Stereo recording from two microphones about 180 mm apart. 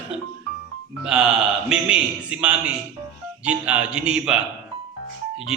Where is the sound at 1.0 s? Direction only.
5° right (ahead or behind).